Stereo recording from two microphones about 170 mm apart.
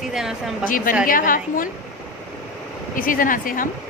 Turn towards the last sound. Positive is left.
turn(degrees=55)  # may be behind; listen again after turning